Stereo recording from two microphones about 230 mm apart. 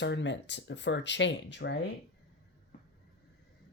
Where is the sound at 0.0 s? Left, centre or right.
Left.